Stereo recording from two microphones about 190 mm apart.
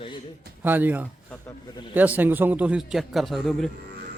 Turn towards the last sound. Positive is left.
turn(degrees=0)  # may be behind; listen again after turning